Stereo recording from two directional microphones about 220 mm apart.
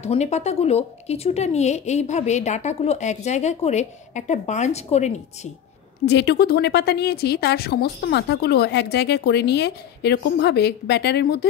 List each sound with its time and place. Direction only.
0.0 s a woman's voice: 30° left (ahead or behind)
6.0 s speech: 50° left (ahead or behind)